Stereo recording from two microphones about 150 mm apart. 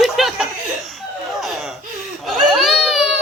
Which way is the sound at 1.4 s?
Centre (ahead or behind).